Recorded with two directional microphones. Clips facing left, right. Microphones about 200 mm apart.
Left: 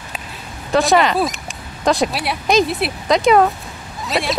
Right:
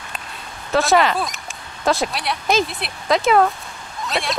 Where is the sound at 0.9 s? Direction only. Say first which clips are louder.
Left 2 dB; centre (ahead or behind).